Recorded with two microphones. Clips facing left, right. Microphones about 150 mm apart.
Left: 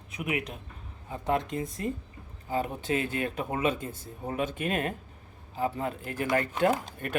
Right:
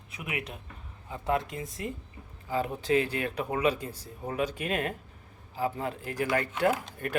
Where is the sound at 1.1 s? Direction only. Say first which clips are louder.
Left 1 dB; 20° left (ahead or behind).